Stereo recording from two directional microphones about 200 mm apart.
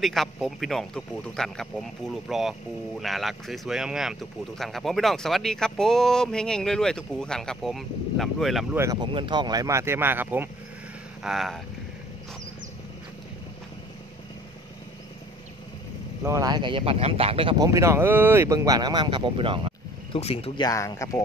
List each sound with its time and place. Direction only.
0.0 s speech: centre (ahead or behind)
8.7 s speech: 20° right (ahead or behind); by 11.6 s centre (ahead or behind)
16.3 s speech: 15° right (ahead or behind)
17.6 s speech: 15° right (ahead or behind)
20.1 s speech: 30° left (ahead or behind)